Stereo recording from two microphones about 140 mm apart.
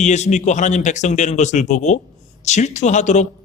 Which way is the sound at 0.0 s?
55° left (ahead or behind).